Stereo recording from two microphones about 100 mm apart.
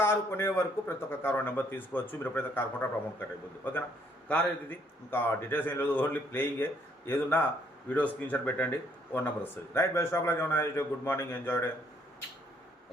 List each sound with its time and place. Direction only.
0.0 s speech: 25° left (ahead or behind)
5.1 s speech: 20° left (ahead or behind)